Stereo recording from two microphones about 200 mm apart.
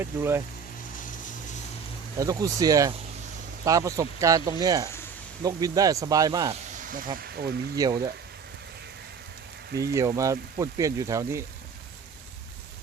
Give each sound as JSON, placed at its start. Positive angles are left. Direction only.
{"t": 0.0, "sound": "speech", "side_deg": -10}
{"t": 0.9, "sound": "vehicle", "side_deg": 40}
{"t": 2.1, "sound": "speech", "side_deg": -15}
{"t": 6.5, "sound": "snake", "side_deg": -40}
{"t": 7.2, "sound": "speech", "side_deg": -50}
{"t": 7.8, "sound": "speech", "side_deg": -15}
{"t": 9.8, "sound": "speech", "side_deg": -15}